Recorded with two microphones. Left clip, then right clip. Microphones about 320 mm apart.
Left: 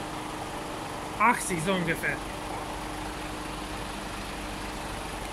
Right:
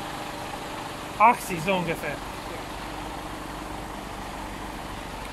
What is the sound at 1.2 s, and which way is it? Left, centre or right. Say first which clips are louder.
Speech: right 5 dB; centre.